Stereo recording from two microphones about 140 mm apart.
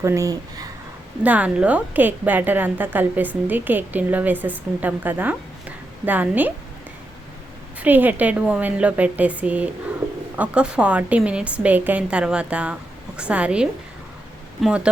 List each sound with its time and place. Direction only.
0.0 s speech: 20° right (ahead or behind)
1.2 s a woman's voice: 10° right (ahead or behind)
7.8 s a woman's voice: 15° right (ahead or behind)